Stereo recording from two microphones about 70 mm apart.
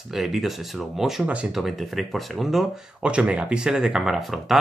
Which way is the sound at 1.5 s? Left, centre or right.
Centre.